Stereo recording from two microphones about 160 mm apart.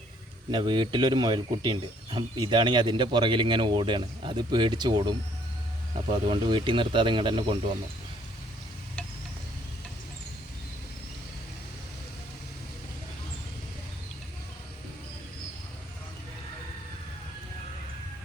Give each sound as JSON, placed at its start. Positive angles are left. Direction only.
{"t": 0.5, "sound": "speech", "side_deg": -30}
{"t": 6.2, "sound": "speech", "side_deg": -30}